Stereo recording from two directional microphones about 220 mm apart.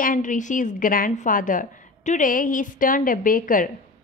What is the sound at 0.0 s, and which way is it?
A woman's voice, 35° left (ahead or behind).